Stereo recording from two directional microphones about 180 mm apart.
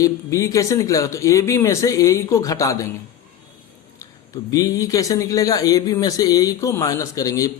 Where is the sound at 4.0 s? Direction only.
20° left (ahead or behind).